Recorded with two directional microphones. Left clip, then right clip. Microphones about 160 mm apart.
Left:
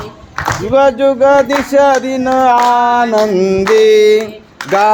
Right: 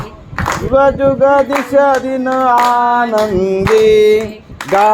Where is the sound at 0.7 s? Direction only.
20° left (ahead or behind); by 4.2 s 5° left (ahead or behind).